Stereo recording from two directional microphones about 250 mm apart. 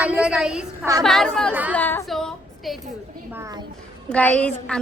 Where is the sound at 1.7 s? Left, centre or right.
Centre.